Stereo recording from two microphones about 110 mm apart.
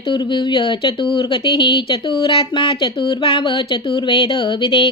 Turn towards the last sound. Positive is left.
turn(degrees=50)  # may be behind; listen again after turning